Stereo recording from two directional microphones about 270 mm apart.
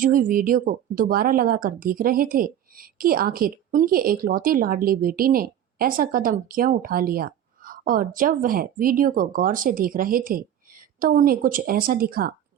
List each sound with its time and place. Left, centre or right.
0.0 s speech: right